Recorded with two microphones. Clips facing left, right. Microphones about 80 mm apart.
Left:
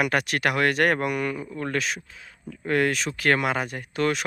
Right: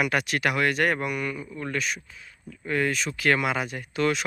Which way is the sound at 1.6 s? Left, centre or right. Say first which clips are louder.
Left 2 dB; left.